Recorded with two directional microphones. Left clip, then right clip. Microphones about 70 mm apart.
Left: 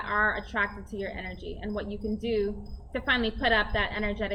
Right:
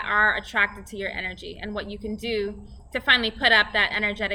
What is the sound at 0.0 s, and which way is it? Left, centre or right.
Speech, right.